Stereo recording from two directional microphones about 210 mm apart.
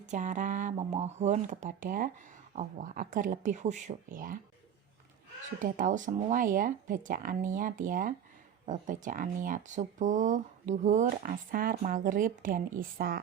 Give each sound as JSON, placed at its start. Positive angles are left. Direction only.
{"t": 0.0, "sound": "speech", "side_deg": -35}
{"t": 5.5, "sound": "speech", "side_deg": -40}